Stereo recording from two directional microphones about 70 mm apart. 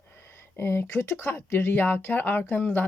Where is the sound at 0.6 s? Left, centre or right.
Left.